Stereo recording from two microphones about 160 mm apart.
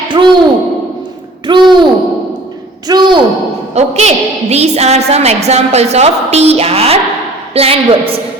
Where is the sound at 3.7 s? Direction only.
45° right (ahead or behind).